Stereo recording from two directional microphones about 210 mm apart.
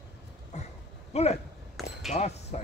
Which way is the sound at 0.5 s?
35° left (ahead or behind).